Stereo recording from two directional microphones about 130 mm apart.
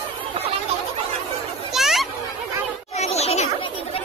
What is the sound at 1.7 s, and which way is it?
Children playing, centre (ahead or behind).